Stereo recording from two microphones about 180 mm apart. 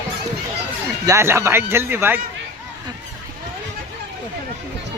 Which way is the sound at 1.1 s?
15° right (ahead or behind).